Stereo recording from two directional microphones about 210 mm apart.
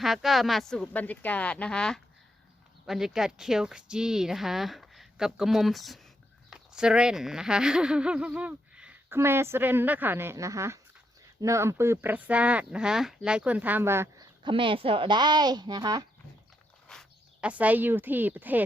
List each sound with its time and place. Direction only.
0.0 s speech: centre (ahead or behind)
14.4 s speech: 25° right (ahead or behind)
16.9 s speech: centre (ahead or behind)